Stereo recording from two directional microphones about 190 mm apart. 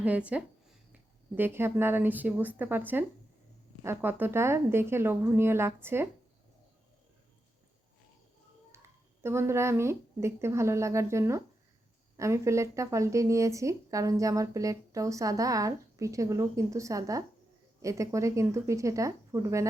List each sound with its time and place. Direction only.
0.0 s speech: 5° right (ahead or behind)
8.7 s a sound: 15° right (ahead or behind)
9.2 s speech: 15° right (ahead or behind)